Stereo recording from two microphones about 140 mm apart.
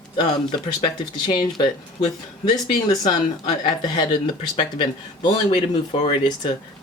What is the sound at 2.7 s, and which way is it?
Speech, 30° left (ahead or behind).